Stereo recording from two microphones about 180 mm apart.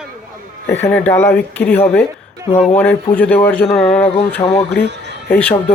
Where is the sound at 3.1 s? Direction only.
10° left (ahead or behind).